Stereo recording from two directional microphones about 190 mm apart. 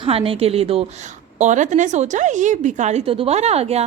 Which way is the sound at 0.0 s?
30° right (ahead or behind).